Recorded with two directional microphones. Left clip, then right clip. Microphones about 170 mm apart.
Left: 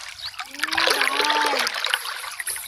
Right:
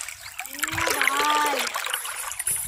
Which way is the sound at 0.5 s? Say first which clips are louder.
Left 4 dB; 30° left (ahead or behind).